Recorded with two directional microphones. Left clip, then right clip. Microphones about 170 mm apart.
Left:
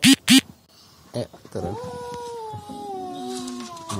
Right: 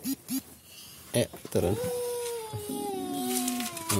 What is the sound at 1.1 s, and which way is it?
Speech, 40° right (ahead or behind).